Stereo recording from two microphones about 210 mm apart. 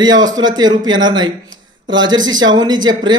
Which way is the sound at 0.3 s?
20° right (ahead or behind).